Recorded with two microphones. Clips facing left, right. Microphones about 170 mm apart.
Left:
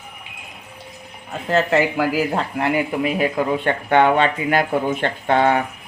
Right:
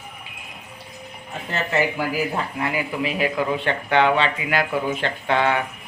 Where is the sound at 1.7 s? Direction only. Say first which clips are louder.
Left 4 dB; 90° left; by 5.6 s 40° left (ahead or behind).